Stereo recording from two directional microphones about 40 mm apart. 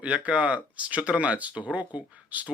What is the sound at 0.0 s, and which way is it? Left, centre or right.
Speech, right.